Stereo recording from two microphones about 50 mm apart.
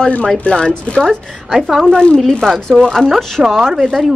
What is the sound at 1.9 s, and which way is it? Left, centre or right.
Speech, centre.